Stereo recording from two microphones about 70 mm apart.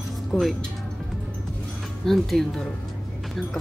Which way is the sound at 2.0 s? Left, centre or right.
Centre.